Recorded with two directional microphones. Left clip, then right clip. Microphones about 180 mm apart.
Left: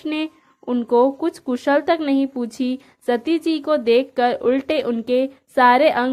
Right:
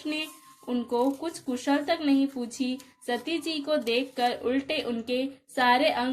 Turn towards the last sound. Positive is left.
turn(degrees=50)  # may be behind; listen again after turning